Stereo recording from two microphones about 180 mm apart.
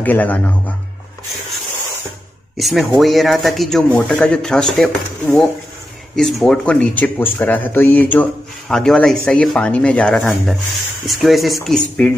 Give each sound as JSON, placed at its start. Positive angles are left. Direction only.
{"t": 0.0, "sound": "a man's voice", "side_deg": 10}
{"t": 2.5, "sound": "speech", "side_deg": 0}